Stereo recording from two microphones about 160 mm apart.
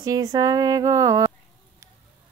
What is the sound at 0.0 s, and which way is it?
A woman's voice, 25° right (ahead or behind).